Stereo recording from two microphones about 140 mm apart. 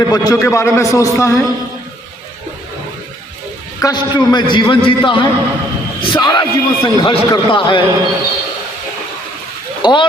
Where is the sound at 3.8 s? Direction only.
30° left (ahead or behind).